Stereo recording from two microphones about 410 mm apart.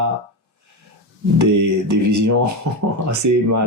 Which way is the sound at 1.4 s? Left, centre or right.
Right.